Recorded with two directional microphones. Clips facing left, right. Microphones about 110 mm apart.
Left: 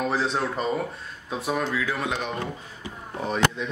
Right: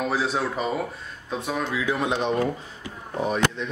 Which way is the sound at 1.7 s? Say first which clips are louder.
Right 2 dB; 20° right (ahead or behind).